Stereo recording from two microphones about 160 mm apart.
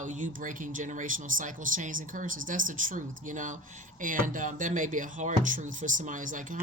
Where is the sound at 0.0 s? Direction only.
50° right (ahead or behind).